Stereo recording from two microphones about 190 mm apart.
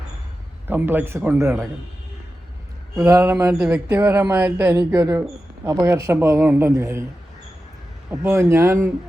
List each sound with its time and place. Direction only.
0.7 s a man's voice: 10° right (ahead or behind)
2.9 s a man's voice: 15° right (ahead or behind)
8.1 s a man's voice: 15° right (ahead or behind)